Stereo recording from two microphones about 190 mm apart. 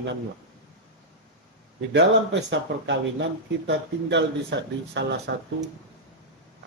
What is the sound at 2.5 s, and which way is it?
Speech, 70° right (ahead or behind).